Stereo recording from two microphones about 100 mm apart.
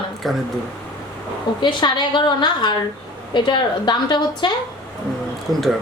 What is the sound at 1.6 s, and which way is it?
A woman's voice, 50° left (ahead or behind).